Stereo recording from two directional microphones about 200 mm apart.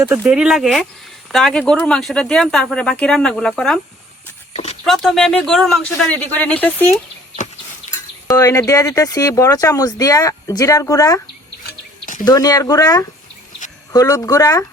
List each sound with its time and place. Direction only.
0.1 s speech: 5° right (ahead or behind)
4.5 s a sound: 30° left (ahead or behind)
4.9 s speech: centre (ahead or behind)
8.3 s speech: 15° left (ahead or behind)
12.2 s speech: 20° left (ahead or behind)